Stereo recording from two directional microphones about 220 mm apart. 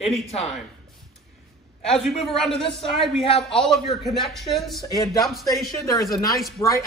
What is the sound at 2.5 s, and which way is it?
Speech, 25° left (ahead or behind).